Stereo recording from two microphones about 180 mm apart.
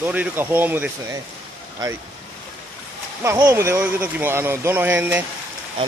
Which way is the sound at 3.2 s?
15° right (ahead or behind).